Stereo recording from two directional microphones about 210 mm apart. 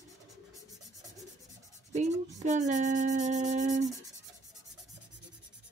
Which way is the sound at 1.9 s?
35° right (ahead or behind).